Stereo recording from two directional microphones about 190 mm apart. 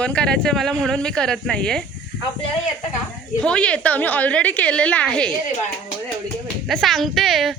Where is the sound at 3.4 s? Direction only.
5° left (ahead or behind).